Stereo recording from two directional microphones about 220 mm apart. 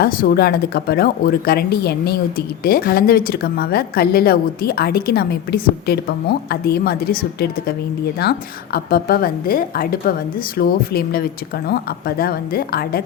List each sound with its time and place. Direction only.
0.0 s speech: 40° left (ahead or behind)